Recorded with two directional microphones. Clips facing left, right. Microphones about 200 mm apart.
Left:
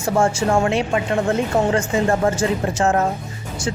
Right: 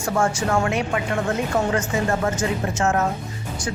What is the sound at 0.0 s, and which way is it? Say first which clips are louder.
A woman's voice: left 4 dB; 25° left (ahead or behind).